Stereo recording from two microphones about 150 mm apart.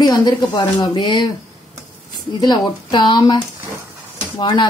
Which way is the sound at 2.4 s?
30° left (ahead or behind).